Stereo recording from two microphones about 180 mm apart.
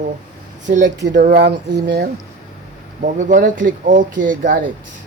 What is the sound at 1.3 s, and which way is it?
Speech, 70° right (ahead or behind).